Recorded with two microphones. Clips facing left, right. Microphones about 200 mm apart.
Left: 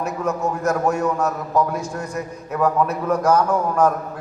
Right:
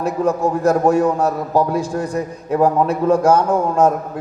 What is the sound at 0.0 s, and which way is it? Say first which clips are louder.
A man's voice: right 5 dB; 30° right (ahead or behind).